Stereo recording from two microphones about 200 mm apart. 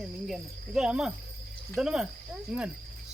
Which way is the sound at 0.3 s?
5° right (ahead or behind).